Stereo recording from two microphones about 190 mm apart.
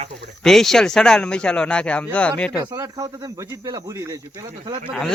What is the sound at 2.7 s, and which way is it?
Speech, 20° right (ahead or behind).